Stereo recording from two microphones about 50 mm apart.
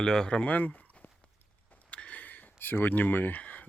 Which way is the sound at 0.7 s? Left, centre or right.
Left.